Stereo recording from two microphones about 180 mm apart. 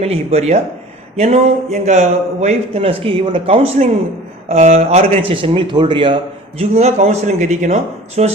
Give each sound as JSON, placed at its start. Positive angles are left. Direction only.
{"t": 0.0, "sound": "a man's voice", "side_deg": -35}